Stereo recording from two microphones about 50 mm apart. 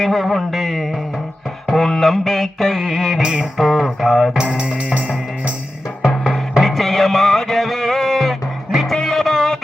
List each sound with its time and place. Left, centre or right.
0.0 s mantra: centre
2.9 s music: centre
3.6 s mantra: centre
4.4 s music: centre
6.1 s music: centre